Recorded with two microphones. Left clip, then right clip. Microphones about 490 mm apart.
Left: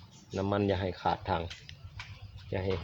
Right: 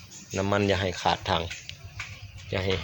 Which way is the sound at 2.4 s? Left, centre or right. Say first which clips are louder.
Right 5 dB; left.